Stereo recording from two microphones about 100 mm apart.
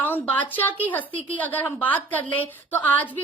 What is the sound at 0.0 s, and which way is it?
A woman's voice, 20° left (ahead or behind).